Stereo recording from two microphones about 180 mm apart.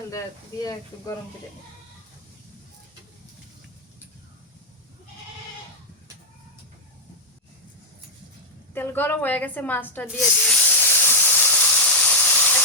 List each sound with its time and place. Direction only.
0.6 s speech: 20° left (ahead or behind)
8.7 s snake: 10° left (ahead or behind)